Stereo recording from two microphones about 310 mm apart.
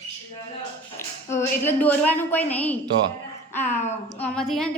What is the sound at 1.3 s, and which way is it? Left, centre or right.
A woman's voice, centre.